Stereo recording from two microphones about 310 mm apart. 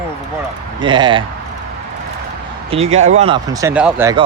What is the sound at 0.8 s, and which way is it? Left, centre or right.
Speech, centre.